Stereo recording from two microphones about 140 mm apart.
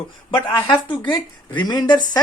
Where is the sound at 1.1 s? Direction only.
30° left (ahead or behind).